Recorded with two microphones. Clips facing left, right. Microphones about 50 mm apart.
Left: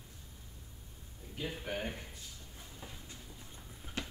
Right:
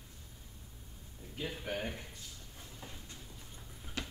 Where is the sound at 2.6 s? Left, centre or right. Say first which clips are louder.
Even; centre.